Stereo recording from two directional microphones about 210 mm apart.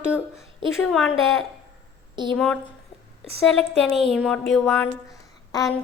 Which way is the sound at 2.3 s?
5° left (ahead or behind).